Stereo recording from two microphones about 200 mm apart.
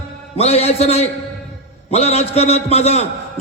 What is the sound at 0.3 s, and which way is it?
A man's voice, 30° left (ahead or behind).